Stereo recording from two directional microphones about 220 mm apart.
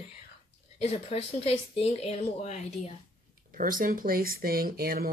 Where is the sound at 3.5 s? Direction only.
40° right (ahead or behind).